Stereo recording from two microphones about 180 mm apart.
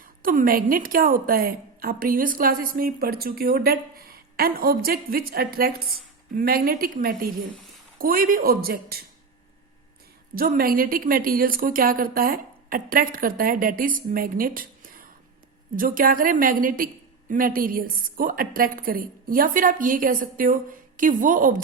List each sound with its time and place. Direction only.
0.2 s a woman's voice: 50° right (ahead or behind)
10.3 s a woman's voice: 55° right (ahead or behind)